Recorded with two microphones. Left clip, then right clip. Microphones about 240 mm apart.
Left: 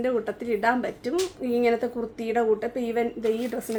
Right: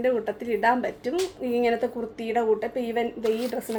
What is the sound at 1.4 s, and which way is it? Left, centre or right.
Speech, right.